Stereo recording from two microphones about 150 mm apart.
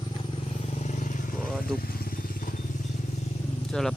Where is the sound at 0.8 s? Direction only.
50° left (ahead or behind).